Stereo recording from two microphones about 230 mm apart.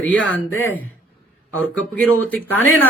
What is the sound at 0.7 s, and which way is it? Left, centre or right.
Speech, left.